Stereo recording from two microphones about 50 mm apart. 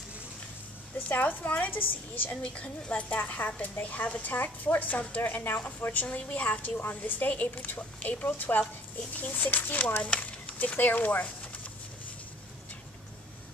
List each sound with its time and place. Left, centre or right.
0.9 s a woman's voice: left
6.0 s a woman's voice: left
10.0 s speech: left